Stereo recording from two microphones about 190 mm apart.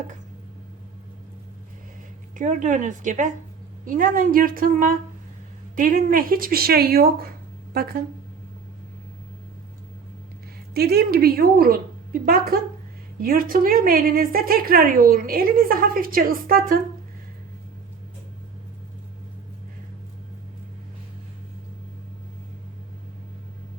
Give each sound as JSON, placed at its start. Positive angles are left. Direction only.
{"t": 2.3, "sound": "a woman's voice", "side_deg": -40}
{"t": 10.8, "sound": "a woman's voice", "side_deg": -55}